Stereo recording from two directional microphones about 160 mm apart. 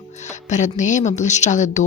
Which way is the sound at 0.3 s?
50° left (ahead or behind).